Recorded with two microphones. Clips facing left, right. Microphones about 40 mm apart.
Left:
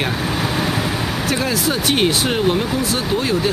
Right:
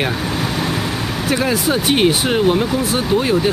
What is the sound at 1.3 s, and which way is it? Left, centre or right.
Speech, centre.